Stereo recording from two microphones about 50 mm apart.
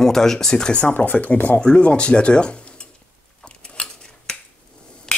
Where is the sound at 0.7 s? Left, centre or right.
Left.